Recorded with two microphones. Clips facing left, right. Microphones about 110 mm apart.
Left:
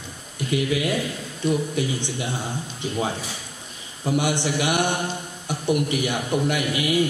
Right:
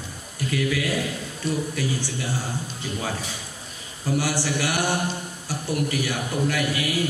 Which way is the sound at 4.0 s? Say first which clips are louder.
Left 2 dB; 20° left (ahead or behind).